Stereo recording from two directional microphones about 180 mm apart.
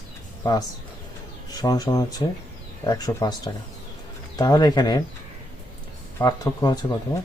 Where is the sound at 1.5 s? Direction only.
20° left (ahead or behind).